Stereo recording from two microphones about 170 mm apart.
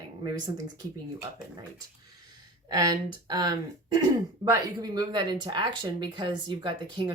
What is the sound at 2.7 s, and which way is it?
Speech, 20° right (ahead or behind).